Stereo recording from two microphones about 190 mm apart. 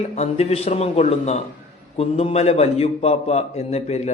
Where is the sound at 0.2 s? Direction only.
35° left (ahead or behind).